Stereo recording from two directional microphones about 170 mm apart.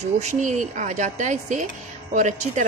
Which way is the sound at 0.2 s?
45° right (ahead or behind).